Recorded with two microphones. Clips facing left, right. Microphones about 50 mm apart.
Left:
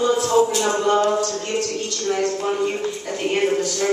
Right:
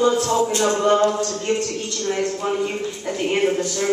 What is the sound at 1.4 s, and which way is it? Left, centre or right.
Speech, right.